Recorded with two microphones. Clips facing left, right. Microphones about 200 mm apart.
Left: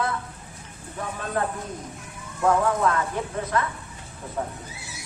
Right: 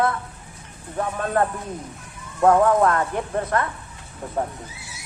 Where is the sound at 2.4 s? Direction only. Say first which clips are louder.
Right 5 dB; 50° right (ahead or behind).